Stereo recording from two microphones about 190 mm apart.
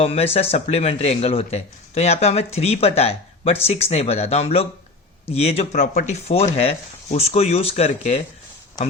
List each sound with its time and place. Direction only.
0.0 s speech: 30° left (ahead or behind)